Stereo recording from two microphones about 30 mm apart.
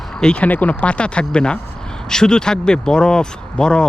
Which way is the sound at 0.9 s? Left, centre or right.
Left.